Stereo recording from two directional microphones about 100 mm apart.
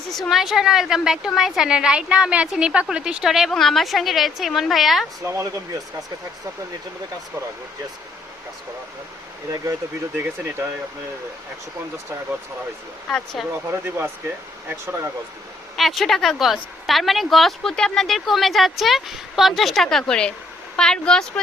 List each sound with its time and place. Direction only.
0.1 s a woman's voice: centre (ahead or behind)
5.2 s speech: 25° right (ahead or behind)
10.2 s speech: 20° right (ahead or behind)
13.1 s a woman's voice: 5° left (ahead or behind)
13.7 s speech: 20° right (ahead or behind)
15.7 s a woman's voice: centre (ahead or behind)